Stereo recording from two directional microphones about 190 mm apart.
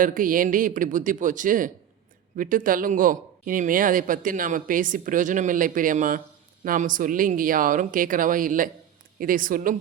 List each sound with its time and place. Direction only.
0.0 s speech: 45° right (ahead or behind)